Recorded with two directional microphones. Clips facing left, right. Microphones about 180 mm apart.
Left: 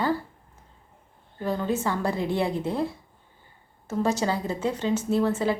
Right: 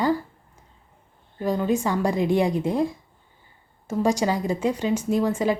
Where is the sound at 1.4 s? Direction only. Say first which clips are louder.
Right 4 dB; 15° right (ahead or behind).